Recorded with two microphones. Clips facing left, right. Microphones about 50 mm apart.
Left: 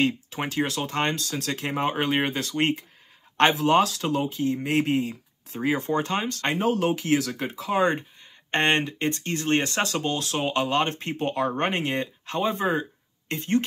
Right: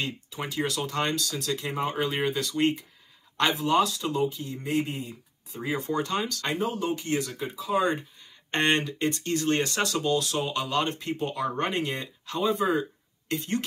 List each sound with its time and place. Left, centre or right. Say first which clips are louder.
0.0 s speech: left 8 dB; left
6.7 s speech: left 6 dB; left
8.5 s speech: left 2 dB; left